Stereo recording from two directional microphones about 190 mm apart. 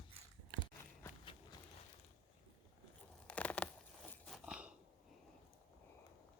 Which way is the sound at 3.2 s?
5° left (ahead or behind).